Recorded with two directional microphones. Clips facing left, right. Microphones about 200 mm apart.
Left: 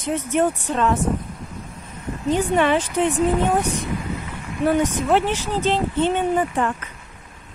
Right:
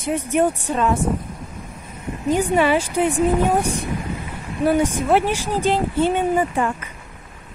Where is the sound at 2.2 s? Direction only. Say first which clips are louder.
Right 1 dB; 10° right (ahead or behind).